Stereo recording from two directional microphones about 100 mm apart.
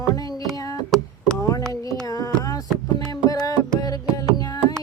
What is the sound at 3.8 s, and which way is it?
Music, 35° left (ahead or behind).